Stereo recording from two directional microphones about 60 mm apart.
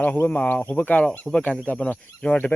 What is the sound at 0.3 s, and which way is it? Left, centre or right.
Speech, left.